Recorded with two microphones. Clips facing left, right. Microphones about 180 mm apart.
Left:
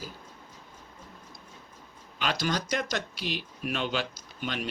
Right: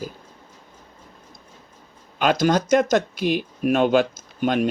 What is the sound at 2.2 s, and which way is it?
Speech, 50° right (ahead or behind).